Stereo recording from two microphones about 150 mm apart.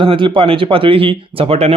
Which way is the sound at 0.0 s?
35° right (ahead or behind).